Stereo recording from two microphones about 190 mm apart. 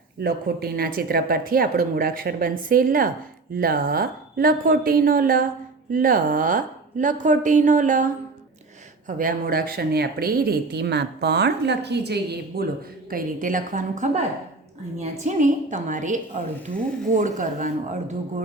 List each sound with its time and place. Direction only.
0.2 s a woman's voice: 55° right (ahead or behind)
13.1 s a woman's voice: 45° right (ahead or behind)